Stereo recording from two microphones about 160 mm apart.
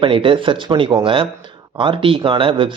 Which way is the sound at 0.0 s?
35° right (ahead or behind).